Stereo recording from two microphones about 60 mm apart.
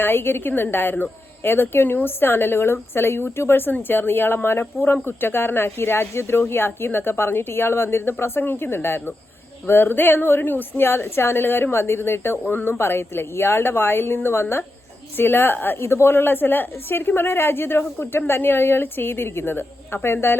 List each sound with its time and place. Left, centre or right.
0.0 s speech: left